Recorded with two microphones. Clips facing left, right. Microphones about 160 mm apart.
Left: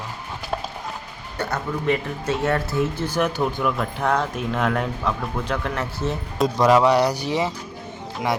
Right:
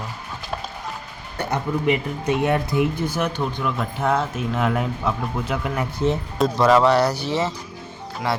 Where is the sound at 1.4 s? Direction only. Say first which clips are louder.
Right 2 dB; 15° right (ahead or behind).